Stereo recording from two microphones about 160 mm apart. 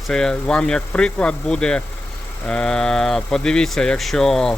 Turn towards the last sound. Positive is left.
turn(degrees=5)  # may be behind; listen again after turning